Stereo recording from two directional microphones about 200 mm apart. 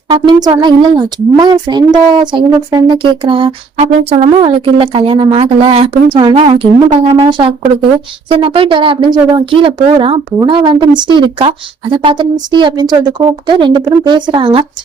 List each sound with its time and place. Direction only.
0.1 s speech: 20° right (ahead or behind)